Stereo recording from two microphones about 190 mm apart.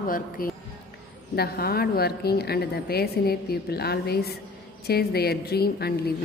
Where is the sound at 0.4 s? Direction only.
50° left (ahead or behind).